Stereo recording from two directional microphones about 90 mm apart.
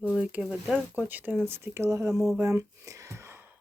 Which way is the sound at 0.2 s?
15° right (ahead or behind).